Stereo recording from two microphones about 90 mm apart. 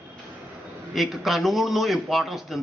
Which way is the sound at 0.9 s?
Centre (ahead or behind).